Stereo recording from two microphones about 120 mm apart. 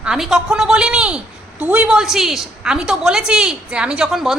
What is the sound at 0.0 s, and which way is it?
A woman's voice, 5° right (ahead or behind).